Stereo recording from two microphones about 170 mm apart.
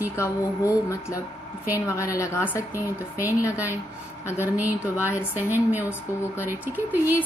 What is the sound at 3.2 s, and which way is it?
A woman's voice, 10° right (ahead or behind).